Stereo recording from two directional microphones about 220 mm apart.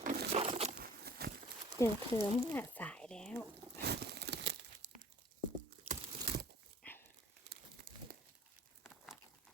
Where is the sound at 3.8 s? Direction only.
50° right (ahead or behind).